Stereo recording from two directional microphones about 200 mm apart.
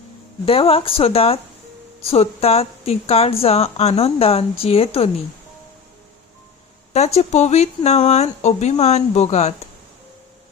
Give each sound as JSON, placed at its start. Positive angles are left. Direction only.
{"t": 0.4, "sound": "a woman's voice", "side_deg": 30}
{"t": 6.9, "sound": "speech", "side_deg": 30}